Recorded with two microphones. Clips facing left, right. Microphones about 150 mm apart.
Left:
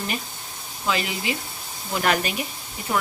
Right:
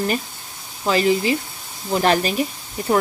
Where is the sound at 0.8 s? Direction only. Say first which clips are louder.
Right 8 dB; 35° right (ahead or behind).